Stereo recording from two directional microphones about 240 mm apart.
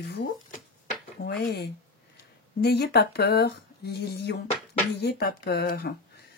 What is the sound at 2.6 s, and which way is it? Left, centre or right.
Speech, left.